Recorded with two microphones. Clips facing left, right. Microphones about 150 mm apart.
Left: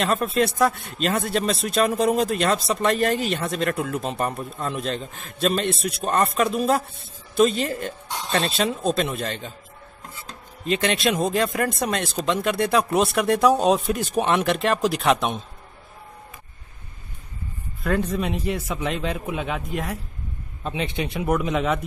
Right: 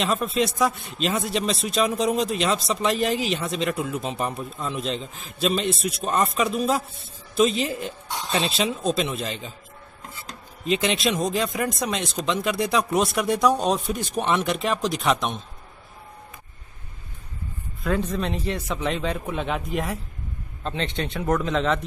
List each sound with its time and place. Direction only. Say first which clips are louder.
0.0 s speech: left 2 dB; centre (ahead or behind)
0.3 s a man's voice: left 2 dB; 60° left (ahead or behind)
0.6 s speech: left 2 dB; centre (ahead or behind)
10.6 s speech: left 1 dB; centre (ahead or behind)
17.8 s speech: left 1 dB; 5° left (ahead or behind)
20.6 s speech: left 1 dB; 10° left (ahead or behind)